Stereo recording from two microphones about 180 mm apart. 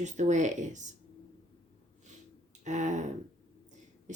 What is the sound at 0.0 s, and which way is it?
Speech, 40° right (ahead or behind).